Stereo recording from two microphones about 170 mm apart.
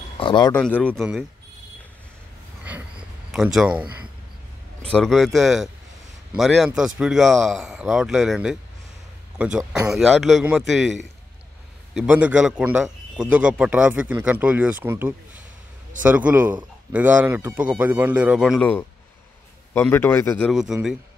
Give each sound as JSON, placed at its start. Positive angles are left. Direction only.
{"t": 0.2, "sound": "speech", "side_deg": 30}
{"t": 0.5, "sound": "a man's voice", "side_deg": 10}
{"t": 3.3, "sound": "a man's voice", "side_deg": -5}
{"t": 9.7, "sound": "a man's voice", "side_deg": -5}
{"t": 11.9, "sound": "a man's voice", "side_deg": -5}
{"t": 19.7, "sound": "a man's voice", "side_deg": 15}
{"t": 20.4, "sound": "a man's voice", "side_deg": 0}